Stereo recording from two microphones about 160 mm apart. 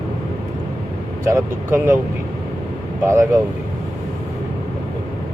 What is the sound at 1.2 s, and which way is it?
Speech, 20° right (ahead or behind).